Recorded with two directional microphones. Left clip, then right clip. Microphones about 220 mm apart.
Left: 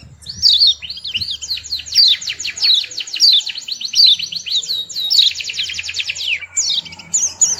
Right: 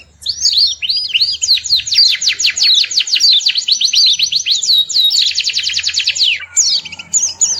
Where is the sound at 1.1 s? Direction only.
55° right (ahead or behind).